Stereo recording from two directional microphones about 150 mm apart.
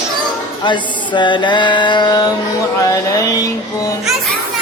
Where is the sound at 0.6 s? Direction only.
30° left (ahead or behind).